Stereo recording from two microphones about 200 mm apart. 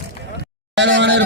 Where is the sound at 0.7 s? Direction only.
65° right (ahead or behind).